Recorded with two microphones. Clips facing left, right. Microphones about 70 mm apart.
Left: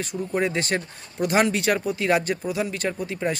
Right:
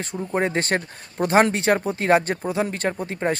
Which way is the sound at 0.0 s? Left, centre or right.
Right.